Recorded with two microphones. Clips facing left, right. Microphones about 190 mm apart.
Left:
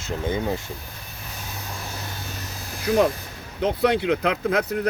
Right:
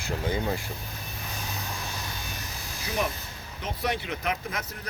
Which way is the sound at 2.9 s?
50° left (ahead or behind).